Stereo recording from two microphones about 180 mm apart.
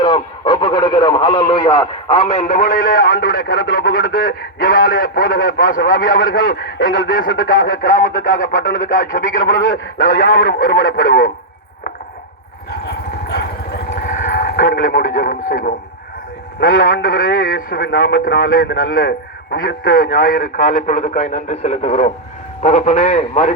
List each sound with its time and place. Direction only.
0.0 s speech: 25° left (ahead or behind)
2.4 s a man's voice: 45° left (ahead or behind)
9.6 s speech: 90° left
10.0 s a man's voice: 50° left (ahead or behind)
13.9 s vehicle: 50° left (ahead or behind)
16.6 s speech: 90° left
16.8 s a man's voice: 55° left (ahead or behind)
18.1 s a man's voice: 65° left (ahead or behind); by 23.6 s 40° left (ahead or behind)